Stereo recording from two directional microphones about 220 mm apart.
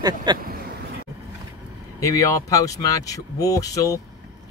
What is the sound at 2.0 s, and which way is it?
Speech, 15° left (ahead or behind).